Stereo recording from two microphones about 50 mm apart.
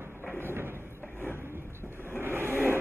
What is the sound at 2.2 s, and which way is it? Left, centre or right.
Vehicle, right.